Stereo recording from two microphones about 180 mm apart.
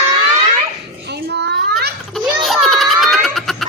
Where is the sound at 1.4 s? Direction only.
65° right (ahead or behind).